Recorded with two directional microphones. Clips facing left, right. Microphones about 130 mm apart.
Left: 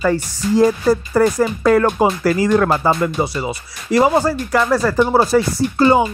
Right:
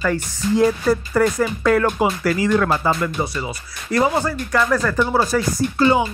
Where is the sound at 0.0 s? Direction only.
30° left (ahead or behind).